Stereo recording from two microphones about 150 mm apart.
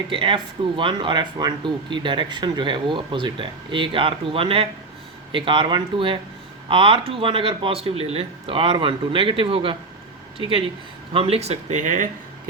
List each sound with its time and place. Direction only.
0.1 s speech: 35° right (ahead or behind); by 12.0 s 55° right (ahead or behind)